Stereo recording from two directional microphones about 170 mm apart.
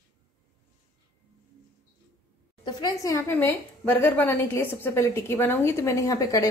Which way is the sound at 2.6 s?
20° left (ahead or behind).